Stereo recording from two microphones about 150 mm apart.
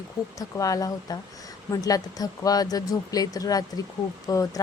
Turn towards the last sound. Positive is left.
turn(degrees=25)  # may be behind; listen again after turning